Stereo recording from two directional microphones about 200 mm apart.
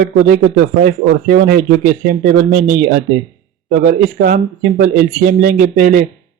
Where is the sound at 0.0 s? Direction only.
45° right (ahead or behind).